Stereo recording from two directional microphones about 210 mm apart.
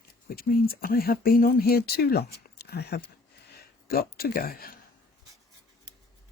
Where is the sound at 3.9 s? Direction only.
45° left (ahead or behind).